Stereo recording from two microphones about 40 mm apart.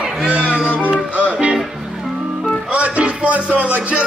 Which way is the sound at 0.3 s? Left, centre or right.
Right.